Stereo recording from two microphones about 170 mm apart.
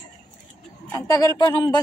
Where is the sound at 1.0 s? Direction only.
20° left (ahead or behind).